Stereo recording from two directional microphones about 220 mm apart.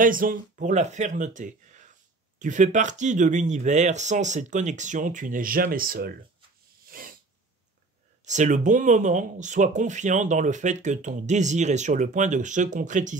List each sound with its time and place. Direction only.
0.0 s speech: 40° right (ahead or behind)
6.9 s a sound: 40° right (ahead or behind)
8.3 s speech: 35° right (ahead or behind)